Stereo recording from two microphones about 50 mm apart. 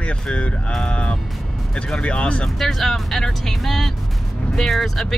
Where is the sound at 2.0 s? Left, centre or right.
Left.